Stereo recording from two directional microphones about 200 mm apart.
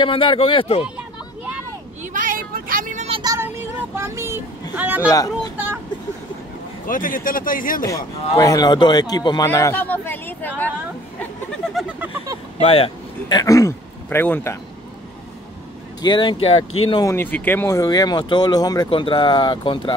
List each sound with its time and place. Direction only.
0.0 s speech: 25° left (ahead or behind)
2.1 s vehicle: 40° right (ahead or behind)
3.2 s vehicle: 20° right (ahead or behind)
4.7 s speech: 10° right (ahead or behind)
5.0 s speech: 15° left (ahead or behind)
6.9 s speech: 45° left (ahead or behind)
7.8 s speech: 15° left (ahead or behind)
12.5 s speech: 30° left (ahead or behind); by 14.6 s 10° left (ahead or behind)
16.0 s speech: 20° left (ahead or behind)
16.9 s speech: 15° left (ahead or behind)